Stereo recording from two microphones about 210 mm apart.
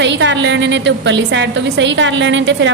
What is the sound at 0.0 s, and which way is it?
A woman's voice, 60° right (ahead or behind).